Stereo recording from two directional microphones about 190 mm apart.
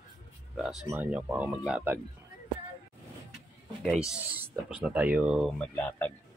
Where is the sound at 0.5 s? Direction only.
Centre (ahead or behind).